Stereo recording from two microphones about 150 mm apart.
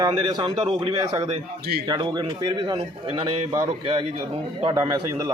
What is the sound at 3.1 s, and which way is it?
A man's voice, 25° right (ahead or behind).